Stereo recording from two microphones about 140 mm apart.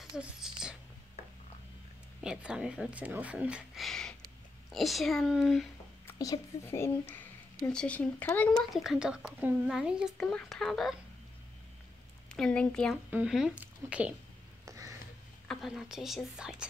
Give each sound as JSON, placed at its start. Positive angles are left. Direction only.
{"t": 0.1, "sound": "a sound", "side_deg": -5}
{"t": 2.2, "sound": "speech", "side_deg": -5}
{"t": 6.1, "sound": "speech", "side_deg": 25}
{"t": 7.5, "sound": "speech", "side_deg": 5}
{"t": 12.4, "sound": "speech", "side_deg": 5}
{"t": 13.1, "sound": "speech", "side_deg": -5}
{"t": 14.7, "sound": "a sound", "side_deg": -25}
{"t": 15.4, "sound": "speech", "side_deg": 0}